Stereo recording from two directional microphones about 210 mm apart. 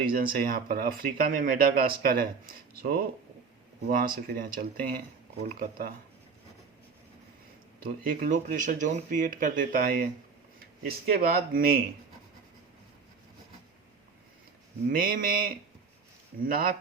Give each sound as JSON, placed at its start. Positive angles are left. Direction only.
{"t": 0.0, "sound": "speech", "side_deg": -45}
{"t": 8.0, "sound": "speech", "side_deg": -40}
{"t": 14.8, "sound": "speech", "side_deg": -45}